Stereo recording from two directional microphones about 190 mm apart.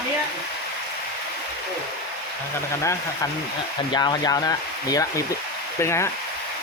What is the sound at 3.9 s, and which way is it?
Speech, 20° left (ahead or behind).